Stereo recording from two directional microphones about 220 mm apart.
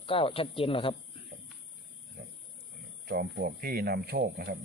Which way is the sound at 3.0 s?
45° right (ahead or behind).